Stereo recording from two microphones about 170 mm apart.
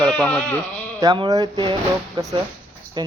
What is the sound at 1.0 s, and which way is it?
Speech, 20° right (ahead or behind).